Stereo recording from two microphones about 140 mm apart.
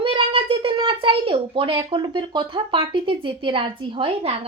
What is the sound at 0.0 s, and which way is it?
Speech, 35° right (ahead or behind).